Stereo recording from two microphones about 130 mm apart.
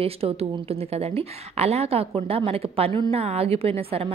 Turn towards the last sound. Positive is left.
turn(degrees=-50)  # may be behind; listen again after turning